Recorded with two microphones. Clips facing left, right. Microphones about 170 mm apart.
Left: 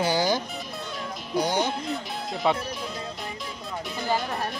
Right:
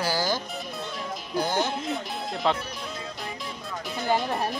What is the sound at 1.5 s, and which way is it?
Speech, 5° right (ahead or behind).